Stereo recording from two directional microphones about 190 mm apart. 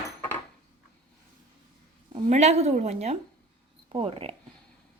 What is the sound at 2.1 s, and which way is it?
A woman's voice, 40° right (ahead or behind).